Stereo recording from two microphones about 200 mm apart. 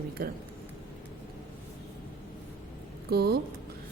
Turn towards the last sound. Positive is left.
turn(degrees=-55)  # may be behind; listen again after turning